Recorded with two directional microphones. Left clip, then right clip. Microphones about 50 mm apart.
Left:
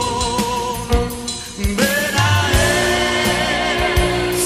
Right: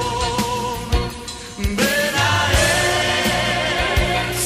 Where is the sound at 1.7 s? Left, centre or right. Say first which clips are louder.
Left 1 dB; left.